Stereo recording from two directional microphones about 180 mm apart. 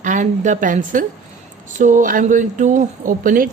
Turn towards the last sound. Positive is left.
turn(degrees=-50)  # may be behind; listen again after turning